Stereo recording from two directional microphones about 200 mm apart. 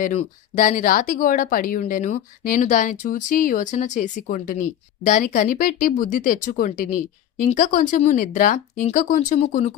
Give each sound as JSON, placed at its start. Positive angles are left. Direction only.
{"t": 0.0, "sound": "speech", "side_deg": 40}